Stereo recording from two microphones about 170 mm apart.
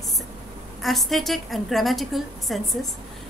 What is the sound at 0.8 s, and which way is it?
A woman's voice, centre (ahead or behind).